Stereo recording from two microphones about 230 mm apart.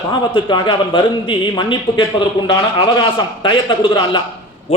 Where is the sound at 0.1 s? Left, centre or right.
Centre.